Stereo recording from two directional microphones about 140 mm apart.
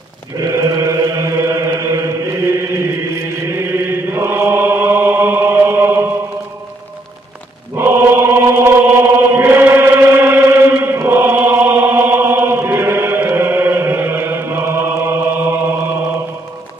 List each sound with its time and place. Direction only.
0.4 s chant: 25° right (ahead or behind)
7.7 s chant: 15° right (ahead or behind)